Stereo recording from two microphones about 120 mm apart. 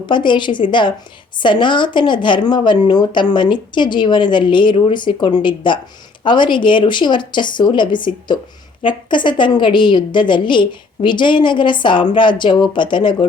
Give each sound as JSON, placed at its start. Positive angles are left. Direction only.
{"t": 0.0, "sound": "speech", "side_deg": 40}